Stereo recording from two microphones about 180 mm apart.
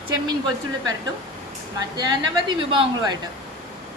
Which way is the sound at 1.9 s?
25° right (ahead or behind).